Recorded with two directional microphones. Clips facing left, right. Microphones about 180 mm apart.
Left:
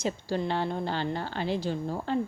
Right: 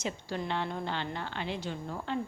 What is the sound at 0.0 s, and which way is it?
Speech, 35° left (ahead or behind).